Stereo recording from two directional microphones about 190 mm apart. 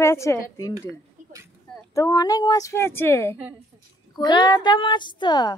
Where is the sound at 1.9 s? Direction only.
20° left (ahead or behind).